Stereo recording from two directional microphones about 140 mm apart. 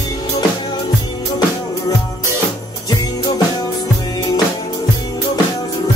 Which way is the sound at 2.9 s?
30° left (ahead or behind).